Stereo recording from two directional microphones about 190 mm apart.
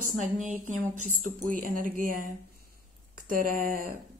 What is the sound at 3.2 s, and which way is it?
Speech, 45° right (ahead or behind).